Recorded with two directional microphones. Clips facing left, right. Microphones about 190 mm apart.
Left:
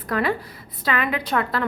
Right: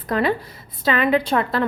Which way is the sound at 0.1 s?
25° right (ahead or behind).